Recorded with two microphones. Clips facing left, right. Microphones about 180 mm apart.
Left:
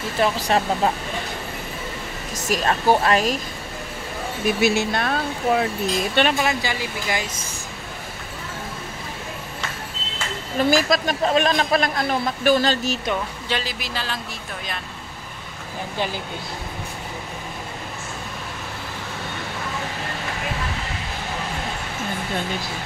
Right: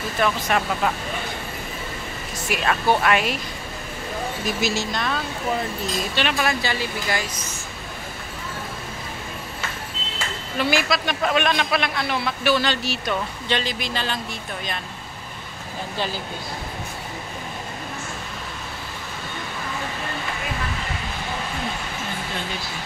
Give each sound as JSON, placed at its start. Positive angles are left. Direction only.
{"t": 0.2, "sound": "speech", "side_deg": 30}
{"t": 2.4, "sound": "speech", "side_deg": 35}
{"t": 4.5, "sound": "speech", "side_deg": 60}
{"t": 6.3, "sound": "speech", "side_deg": 15}
{"t": 10.6, "sound": "speech", "side_deg": 40}
{"t": 13.5, "sound": "a man's voice", "side_deg": 5}